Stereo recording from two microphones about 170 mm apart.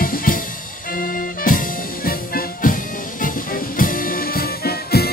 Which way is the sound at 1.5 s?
55° left (ahead or behind).